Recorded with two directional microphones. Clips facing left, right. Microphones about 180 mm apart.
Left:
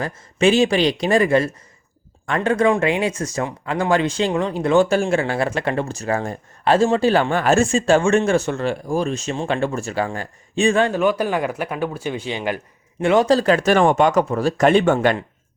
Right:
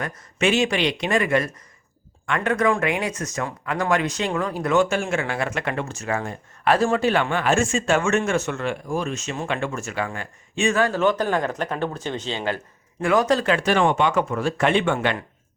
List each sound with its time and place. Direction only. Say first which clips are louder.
0.0 s speech: left 5 dB; 30° left (ahead or behind)
11.0 s speech: left 2 dB; 10° left (ahead or behind)
13.0 s speech: left 4 dB; 25° left (ahead or behind)